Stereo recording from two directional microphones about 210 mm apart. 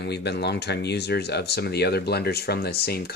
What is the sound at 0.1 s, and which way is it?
Speech, 50° left (ahead or behind).